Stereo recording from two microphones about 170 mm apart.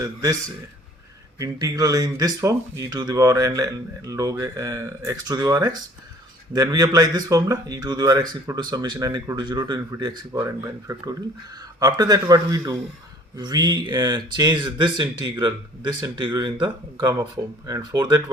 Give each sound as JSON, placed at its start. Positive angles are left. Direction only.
{"t": 0.0, "sound": "speech", "side_deg": -20}
{"t": 1.4, "sound": "speech", "side_deg": -20}